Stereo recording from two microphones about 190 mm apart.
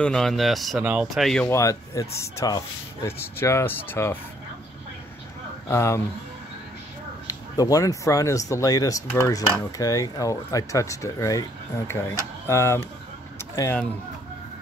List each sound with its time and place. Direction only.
0.0 s speech: 5° left (ahead or behind)
1.5 s speech: 15° left (ahead or behind)
5.7 s speech: 15° left (ahead or behind)
7.2 s speech: 20° left (ahead or behind)
13.4 s a sound: 15° left (ahead or behind)